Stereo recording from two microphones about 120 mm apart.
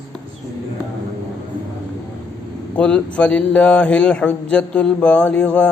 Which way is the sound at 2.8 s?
10° left (ahead or behind).